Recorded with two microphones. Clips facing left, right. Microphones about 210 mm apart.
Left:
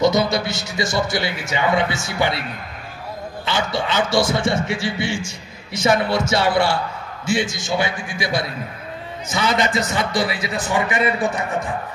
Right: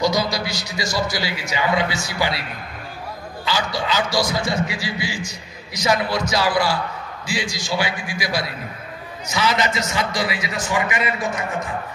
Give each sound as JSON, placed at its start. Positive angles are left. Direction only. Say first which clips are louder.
{"t": 0.0, "sound": "a man's voice", "louder": "left 4 dB", "side_deg": 25}
{"t": 3.4, "sound": "a man's voice", "louder": "left 1 dB", "side_deg": 25}
{"t": 9.3, "sound": "a man's voice", "louder": "left 1 dB", "side_deg": 55}
{"t": 10.5, "sound": "a man's voice", "louder": "left 2 dB", "side_deg": 30}